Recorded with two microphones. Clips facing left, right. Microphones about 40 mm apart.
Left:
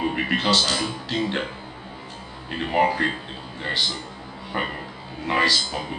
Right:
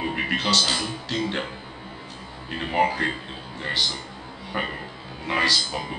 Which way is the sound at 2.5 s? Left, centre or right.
Centre.